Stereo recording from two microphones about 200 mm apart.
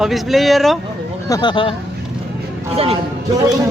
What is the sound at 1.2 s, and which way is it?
Speech, 20° left (ahead or behind).